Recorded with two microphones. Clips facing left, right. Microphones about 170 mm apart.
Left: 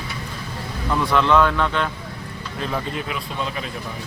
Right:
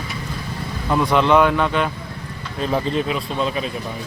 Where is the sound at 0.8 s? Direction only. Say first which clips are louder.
Right 3 dB; 20° right (ahead or behind).